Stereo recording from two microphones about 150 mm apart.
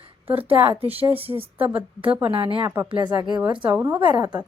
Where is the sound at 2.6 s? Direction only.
20° right (ahead or behind).